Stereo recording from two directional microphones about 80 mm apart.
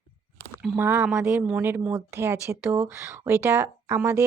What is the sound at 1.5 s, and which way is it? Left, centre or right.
Speech, right.